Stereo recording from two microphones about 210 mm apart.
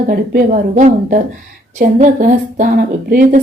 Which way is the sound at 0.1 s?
45° right (ahead or behind).